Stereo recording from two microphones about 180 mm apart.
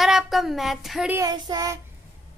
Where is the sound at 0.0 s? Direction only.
Centre (ahead or behind).